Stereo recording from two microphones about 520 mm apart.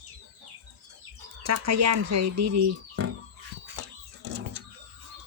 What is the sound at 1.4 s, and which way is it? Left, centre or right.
Speech, right.